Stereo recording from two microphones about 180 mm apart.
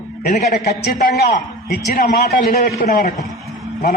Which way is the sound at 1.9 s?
50° left (ahead or behind).